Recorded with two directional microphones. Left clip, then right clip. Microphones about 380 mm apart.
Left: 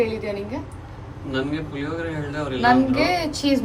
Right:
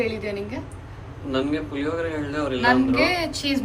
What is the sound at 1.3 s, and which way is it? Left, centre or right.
A man's voice, centre.